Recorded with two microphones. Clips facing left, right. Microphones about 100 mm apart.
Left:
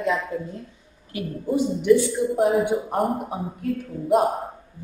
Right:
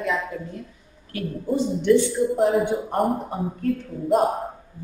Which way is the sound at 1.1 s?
10° left (ahead or behind).